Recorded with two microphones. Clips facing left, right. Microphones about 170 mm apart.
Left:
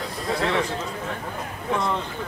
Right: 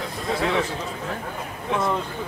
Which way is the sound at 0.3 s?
Centre (ahead or behind).